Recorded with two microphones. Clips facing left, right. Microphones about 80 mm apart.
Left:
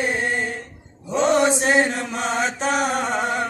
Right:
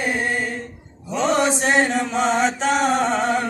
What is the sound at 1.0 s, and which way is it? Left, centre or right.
Mantra, left.